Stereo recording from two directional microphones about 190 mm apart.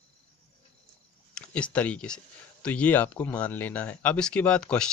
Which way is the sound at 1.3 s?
5° left (ahead or behind).